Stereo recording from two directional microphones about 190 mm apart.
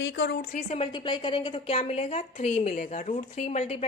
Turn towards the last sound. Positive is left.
turn(degrees=35)  # may be behind; listen again after turning